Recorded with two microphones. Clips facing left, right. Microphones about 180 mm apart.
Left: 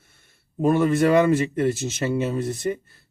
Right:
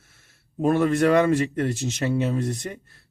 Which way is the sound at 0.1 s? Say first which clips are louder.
Right 1 dB; centre (ahead or behind).